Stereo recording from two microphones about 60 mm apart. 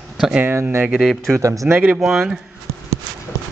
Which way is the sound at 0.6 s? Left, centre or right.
Right.